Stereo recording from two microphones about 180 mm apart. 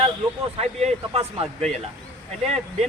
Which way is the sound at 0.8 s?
35° right (ahead or behind).